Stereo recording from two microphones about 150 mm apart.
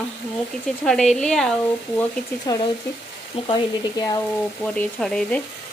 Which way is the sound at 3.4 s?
30° left (ahead or behind).